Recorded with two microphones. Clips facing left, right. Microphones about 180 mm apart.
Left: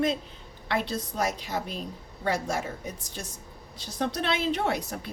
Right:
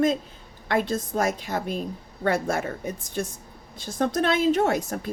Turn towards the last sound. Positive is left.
turn(degrees=-45)  # may be behind; listen again after turning